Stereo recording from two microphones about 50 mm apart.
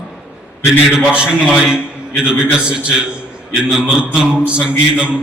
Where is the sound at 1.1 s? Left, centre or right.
Right.